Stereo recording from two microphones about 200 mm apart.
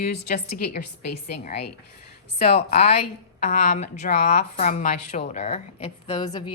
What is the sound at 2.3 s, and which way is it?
A woman's voice, 30° left (ahead or behind).